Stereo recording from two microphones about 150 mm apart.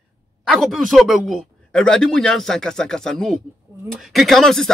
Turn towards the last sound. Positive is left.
turn(degrees=0)  # may be behind; listen again after turning